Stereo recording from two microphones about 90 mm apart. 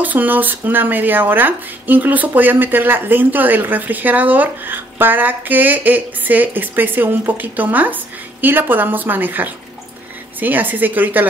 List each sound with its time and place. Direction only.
0.0 s speech: 20° right (ahead or behind)